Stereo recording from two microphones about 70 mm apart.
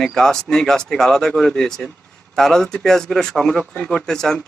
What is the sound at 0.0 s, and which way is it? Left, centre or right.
A man's voice, centre.